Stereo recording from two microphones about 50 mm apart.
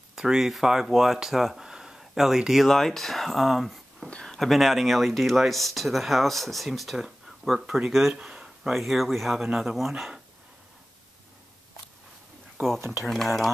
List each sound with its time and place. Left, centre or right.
0.1 s speech: centre
2.7 s speech: centre
4.1 s a sound: centre
4.4 s speech: centre
8.1 s a sound: centre
8.7 s speech: centre
12.6 s speech: right
13.0 s speech: centre